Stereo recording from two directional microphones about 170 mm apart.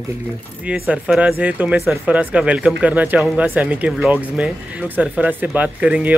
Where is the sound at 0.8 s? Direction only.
5° right (ahead or behind).